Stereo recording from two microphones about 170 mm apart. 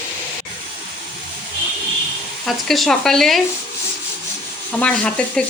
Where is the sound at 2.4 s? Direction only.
Centre (ahead or behind).